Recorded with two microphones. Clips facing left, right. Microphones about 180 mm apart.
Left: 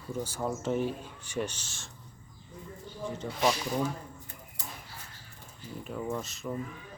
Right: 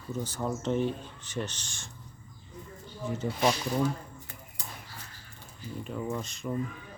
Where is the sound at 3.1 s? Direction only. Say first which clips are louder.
Right 2 dB; 5° right (ahead or behind).